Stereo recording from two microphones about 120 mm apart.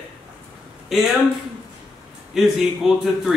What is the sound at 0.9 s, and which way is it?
Speech, centre (ahead or behind).